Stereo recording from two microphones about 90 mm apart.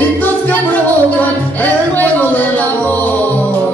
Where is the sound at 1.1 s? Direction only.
15° left (ahead or behind).